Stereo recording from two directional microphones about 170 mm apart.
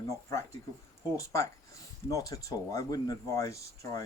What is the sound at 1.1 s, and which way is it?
Speech, 20° left (ahead or behind).